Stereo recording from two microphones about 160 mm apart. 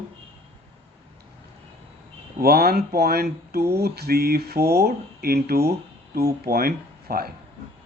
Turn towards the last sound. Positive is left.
turn(degrees=-70)  # may be behind; listen again after turning